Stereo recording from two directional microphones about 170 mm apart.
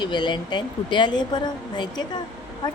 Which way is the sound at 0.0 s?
25° left (ahead or behind).